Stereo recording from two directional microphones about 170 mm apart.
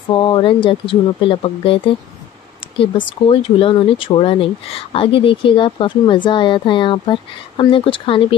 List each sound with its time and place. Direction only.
0.1 s speech: 30° left (ahead or behind)